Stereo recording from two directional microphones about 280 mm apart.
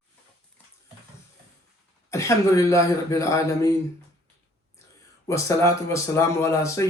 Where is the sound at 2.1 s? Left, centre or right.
Centre.